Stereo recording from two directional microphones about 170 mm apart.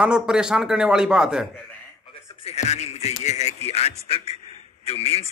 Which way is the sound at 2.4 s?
40° left (ahead or behind).